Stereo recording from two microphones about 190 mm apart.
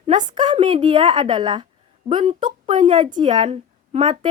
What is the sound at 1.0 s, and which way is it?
Speech, 25° right (ahead or behind).